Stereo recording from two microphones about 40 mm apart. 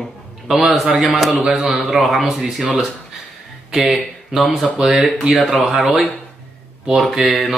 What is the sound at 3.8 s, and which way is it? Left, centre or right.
Speech, centre.